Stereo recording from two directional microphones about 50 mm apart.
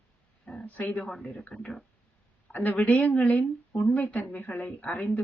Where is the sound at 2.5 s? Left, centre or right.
Left.